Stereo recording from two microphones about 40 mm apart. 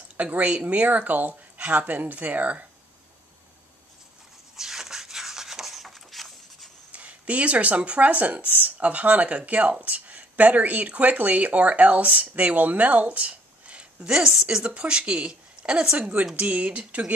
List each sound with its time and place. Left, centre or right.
0.2 s speech: right
4.6 s a sound: centre
6.9 s speech: right
14.2 s a woman's voice: centre
14.6 s a woman's voice: right